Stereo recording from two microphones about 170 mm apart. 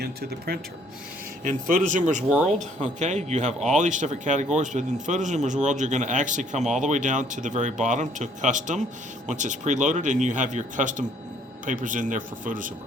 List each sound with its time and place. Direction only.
0.0 s speech: 65° right (ahead or behind)
1.5 s speech: 50° right (ahead or behind)